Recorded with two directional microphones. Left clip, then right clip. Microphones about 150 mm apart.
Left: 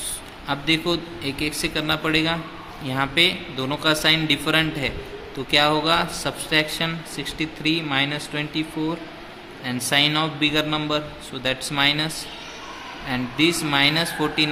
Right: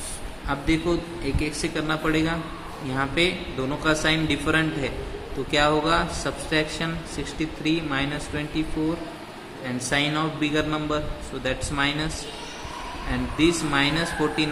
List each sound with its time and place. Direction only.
0.4 s a man's voice: 25° left (ahead or behind)
9.9 s a man's voice: 30° left (ahead or behind)